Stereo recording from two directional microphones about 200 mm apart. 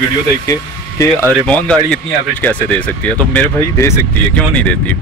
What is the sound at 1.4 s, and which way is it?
Speech, 5° left (ahead or behind).